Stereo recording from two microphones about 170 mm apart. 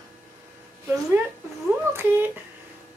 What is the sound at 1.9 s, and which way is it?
Speech, 10° right (ahead or behind).